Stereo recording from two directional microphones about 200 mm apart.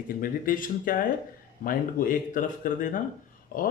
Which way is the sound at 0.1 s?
45° left (ahead or behind).